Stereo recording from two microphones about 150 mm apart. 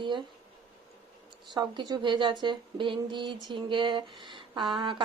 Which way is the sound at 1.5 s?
30° right (ahead or behind).